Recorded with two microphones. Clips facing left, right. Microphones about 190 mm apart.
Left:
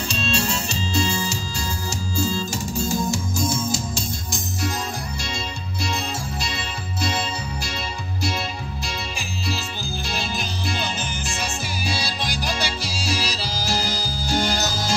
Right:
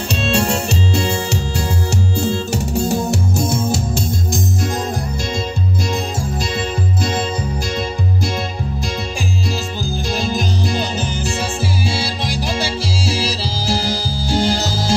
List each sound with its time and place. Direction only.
0.1 s music: 65° right (ahead or behind)
10.1 s music: 45° right (ahead or behind)
11.8 s music: 25° right (ahead or behind)